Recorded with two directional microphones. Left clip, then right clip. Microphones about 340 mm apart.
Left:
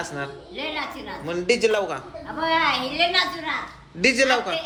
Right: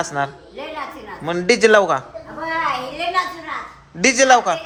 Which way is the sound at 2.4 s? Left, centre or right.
Centre.